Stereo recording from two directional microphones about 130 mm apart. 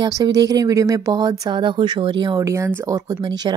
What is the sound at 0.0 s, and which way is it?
Speech, 30° right (ahead or behind).